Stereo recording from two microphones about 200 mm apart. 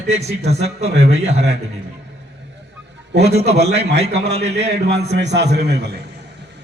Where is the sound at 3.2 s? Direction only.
35° right (ahead or behind).